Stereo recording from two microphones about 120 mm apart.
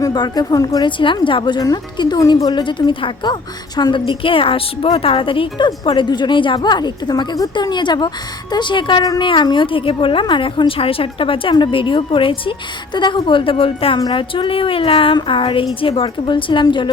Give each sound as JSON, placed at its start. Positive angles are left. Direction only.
{"t": 0.0, "sound": "a woman's voice", "side_deg": 35}
{"t": 0.9, "sound": "a woman's voice", "side_deg": 45}